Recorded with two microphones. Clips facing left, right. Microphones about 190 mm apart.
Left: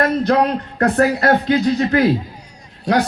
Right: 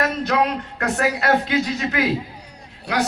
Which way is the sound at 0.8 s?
40° left (ahead or behind).